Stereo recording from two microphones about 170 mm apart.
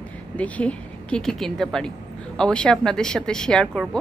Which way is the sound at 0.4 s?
5° left (ahead or behind).